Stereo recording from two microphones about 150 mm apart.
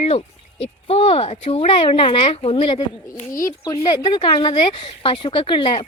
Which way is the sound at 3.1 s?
65° left (ahead or behind).